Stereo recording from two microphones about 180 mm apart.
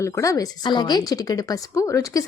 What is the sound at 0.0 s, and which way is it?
Speech, 15° left (ahead or behind).